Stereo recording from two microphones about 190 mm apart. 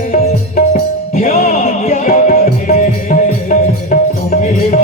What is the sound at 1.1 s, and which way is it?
Music, 40° left (ahead or behind).